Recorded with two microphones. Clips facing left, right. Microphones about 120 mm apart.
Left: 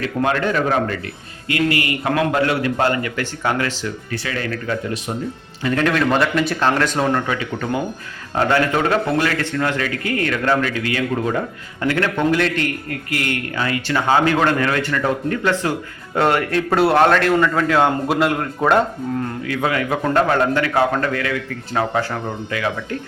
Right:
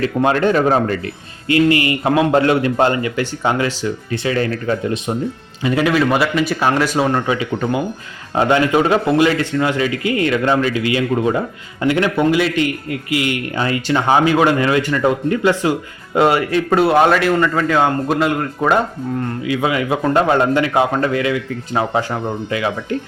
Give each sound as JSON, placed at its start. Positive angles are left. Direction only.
{"t": 0.2, "sound": "a man's voice", "side_deg": -30}
{"t": 5.6, "sound": "speech", "side_deg": -10}
{"t": 13.6, "sound": "a man's voice", "side_deg": -25}
{"t": 19.5, "sound": "a man's voice", "side_deg": -10}